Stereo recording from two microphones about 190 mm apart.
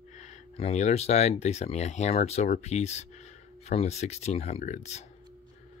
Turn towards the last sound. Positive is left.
turn(degrees=35)  # may be behind; listen again after turning